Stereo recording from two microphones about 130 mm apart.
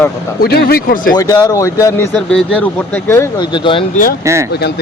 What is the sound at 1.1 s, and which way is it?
Speech, 30° left (ahead or behind).